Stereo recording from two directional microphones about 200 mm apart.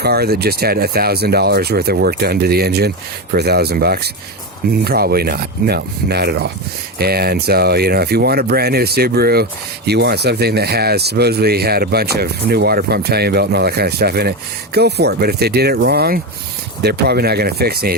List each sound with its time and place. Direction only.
0.0 s speech: 50° right (ahead or behind)